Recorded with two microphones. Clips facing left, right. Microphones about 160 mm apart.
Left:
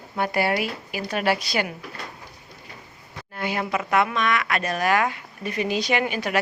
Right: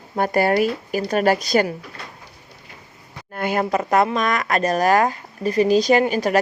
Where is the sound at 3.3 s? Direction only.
50° right (ahead or behind).